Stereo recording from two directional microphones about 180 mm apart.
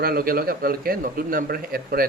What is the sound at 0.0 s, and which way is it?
A man's voice, 55° right (ahead or behind).